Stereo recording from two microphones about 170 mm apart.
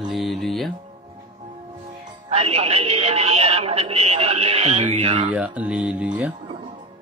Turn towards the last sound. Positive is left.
turn(degrees=-10)  # may be behind; listen again after turning